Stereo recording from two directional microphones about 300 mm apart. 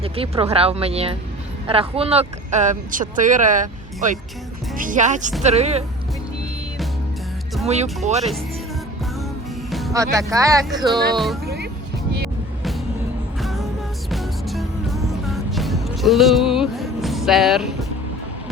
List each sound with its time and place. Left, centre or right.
0.0 s speech: centre
7.7 s speech: right
9.6 s music: centre
9.9 s speech: centre
10.7 s speech: centre
11.4 s music: right
13.4 s music: centre